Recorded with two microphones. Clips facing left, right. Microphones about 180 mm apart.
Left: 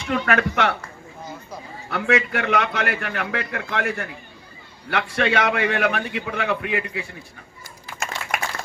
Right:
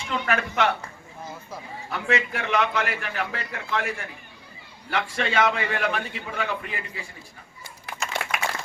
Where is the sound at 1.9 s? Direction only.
60° left (ahead or behind).